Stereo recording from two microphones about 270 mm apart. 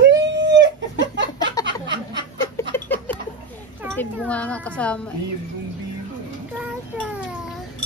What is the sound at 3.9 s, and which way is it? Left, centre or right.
Speech, centre.